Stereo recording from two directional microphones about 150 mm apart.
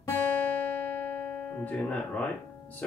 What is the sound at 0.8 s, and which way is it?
Music, 15° left (ahead or behind).